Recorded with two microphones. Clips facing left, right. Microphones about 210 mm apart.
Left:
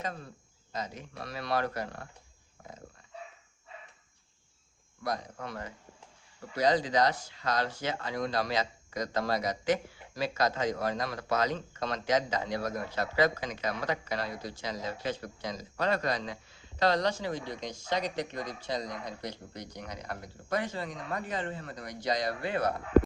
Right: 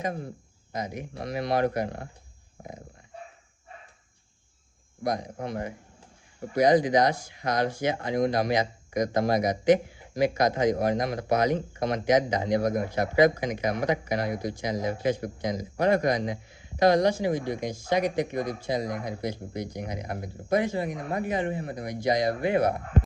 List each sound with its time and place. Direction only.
0.0 s speech: 20° right (ahead or behind)
5.0 s speech: 15° right (ahead or behind)